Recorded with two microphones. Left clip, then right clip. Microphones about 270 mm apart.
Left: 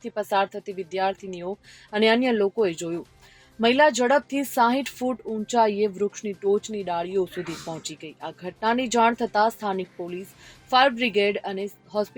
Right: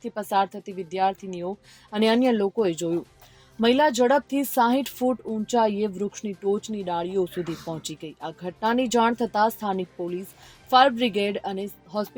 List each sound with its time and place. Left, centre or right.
0.0 s speech: right